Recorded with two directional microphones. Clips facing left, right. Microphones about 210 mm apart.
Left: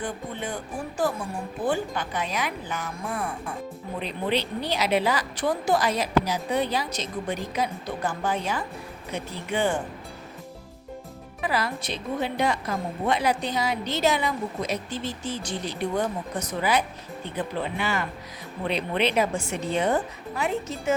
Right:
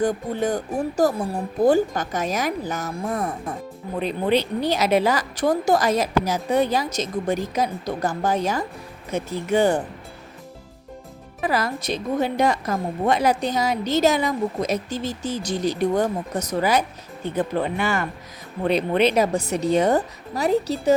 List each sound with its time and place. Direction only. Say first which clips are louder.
0.0 s a woman's voice: right 10 dB; 40° right (ahead or behind)
11.3 s a woman's voice: right 4 dB; 45° right (ahead or behind)